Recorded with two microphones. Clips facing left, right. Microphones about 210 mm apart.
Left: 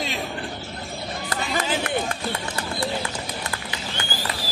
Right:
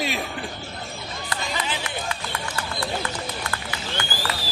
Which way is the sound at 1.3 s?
45° left (ahead or behind).